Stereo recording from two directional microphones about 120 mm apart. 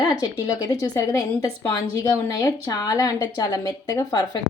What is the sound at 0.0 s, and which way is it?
A woman's voice, 35° left (ahead or behind).